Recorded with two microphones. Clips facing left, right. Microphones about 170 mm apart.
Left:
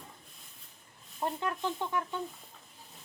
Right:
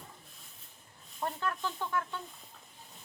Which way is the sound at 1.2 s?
20° left (ahead or behind).